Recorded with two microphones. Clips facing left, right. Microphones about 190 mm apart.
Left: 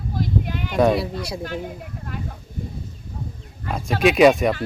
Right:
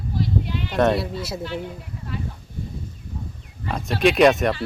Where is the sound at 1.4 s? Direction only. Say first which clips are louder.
Left 1 dB; 50° left (ahead or behind).